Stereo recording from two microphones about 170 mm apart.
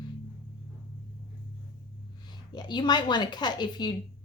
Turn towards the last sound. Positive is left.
turn(degrees=25)  # may be behind; listen again after turning